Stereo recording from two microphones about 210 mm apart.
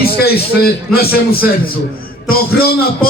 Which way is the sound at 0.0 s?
45° left (ahead or behind).